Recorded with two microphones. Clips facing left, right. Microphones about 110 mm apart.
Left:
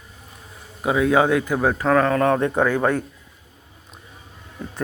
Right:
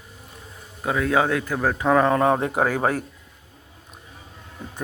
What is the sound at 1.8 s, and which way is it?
Speech, 15° right (ahead or behind).